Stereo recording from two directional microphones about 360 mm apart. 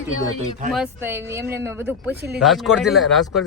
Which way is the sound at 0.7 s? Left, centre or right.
Centre.